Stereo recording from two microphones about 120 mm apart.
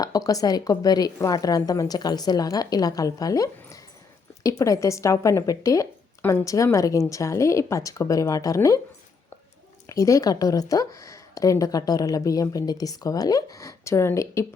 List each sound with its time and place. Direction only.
0.0 s a woman's voice: 30° left (ahead or behind)
9.9 s a woman's voice: 30° left (ahead or behind)